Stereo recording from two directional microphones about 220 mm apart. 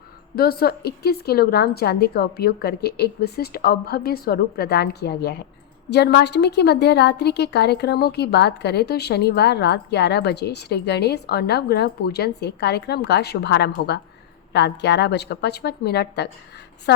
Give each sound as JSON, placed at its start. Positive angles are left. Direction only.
{"t": 0.3, "sound": "a woman's voice", "side_deg": 45}